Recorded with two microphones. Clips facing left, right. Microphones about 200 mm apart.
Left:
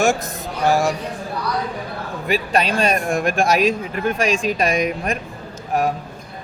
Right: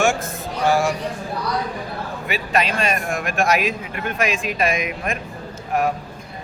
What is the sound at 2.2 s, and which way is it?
A man's voice, 35° left (ahead or behind).